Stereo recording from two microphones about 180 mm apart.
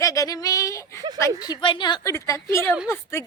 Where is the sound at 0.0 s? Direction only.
20° left (ahead or behind).